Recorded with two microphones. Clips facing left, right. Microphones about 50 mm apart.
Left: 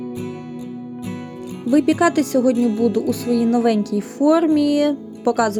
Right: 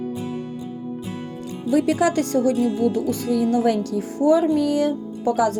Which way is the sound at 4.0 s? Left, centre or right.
Left.